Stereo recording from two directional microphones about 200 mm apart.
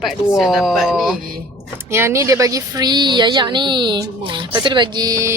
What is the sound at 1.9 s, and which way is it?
A woman's voice, 15° right (ahead or behind).